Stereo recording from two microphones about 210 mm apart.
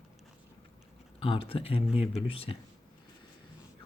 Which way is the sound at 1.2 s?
25° left (ahead or behind).